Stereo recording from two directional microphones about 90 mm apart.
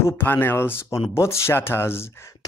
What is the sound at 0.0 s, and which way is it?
Speech, 20° left (ahead or behind).